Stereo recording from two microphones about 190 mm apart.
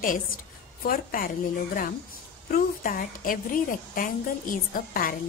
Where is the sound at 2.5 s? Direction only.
50° left (ahead or behind).